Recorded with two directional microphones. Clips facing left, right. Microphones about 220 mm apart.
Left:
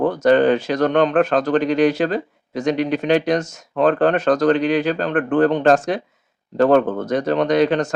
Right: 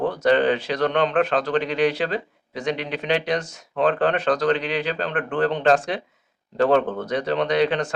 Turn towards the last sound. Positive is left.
turn(degrees=45)  # may be behind; listen again after turning